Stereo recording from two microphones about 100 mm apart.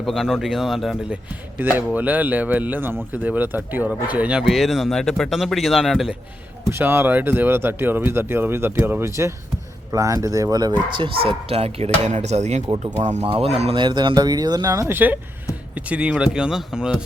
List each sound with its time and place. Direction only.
0.0 s speech: centre (ahead or behind)
1.1 s speech: 20° right (ahead or behind); by 6.1 s centre (ahead or behind)
6.7 s speech: 25° right (ahead or behind); by 12.5 s 90° right
12.8 s speech: 70° right (ahead or behind)
13.7 s speech: 50° right (ahead or behind); by 14.8 s 35° right (ahead or behind)
14.8 s speech: 20° right (ahead or behind)